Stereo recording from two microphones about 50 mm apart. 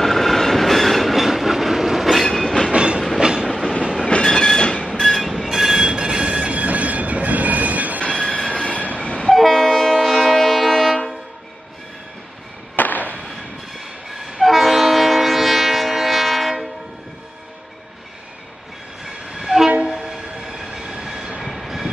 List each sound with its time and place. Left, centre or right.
0.0 s train: centre
2.2 s train: centre
2.7 s train: right
3.4 s train: centre
4.1 s train: centre
5.0 s train: centre; by 8.0 s right
8.0 s train: centre
8.6 s train: left
9.3 s train: centre
12.7 s fireworks: left
13.7 s train: centre
19.0 s train: centre